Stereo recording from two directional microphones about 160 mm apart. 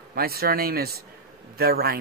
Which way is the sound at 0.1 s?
75° right (ahead or behind).